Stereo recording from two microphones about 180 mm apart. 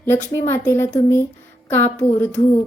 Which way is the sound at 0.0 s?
15° left (ahead or behind).